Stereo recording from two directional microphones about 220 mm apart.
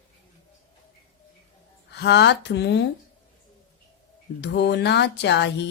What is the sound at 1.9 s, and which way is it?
Speech, 50° left (ahead or behind).